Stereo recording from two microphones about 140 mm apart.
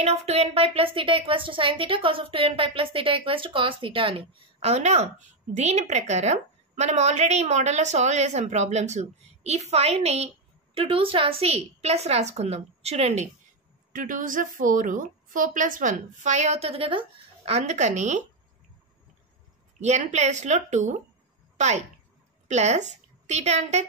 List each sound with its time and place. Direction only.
0.0 s a woman's voice: 50° right (ahead or behind)
13.9 s a woman's voice: 75° right (ahead or behind); by 17.0 s 40° right (ahead or behind)
17.5 s a woman's voice: 50° right (ahead or behind)
19.8 s a woman's voice: 55° right (ahead or behind)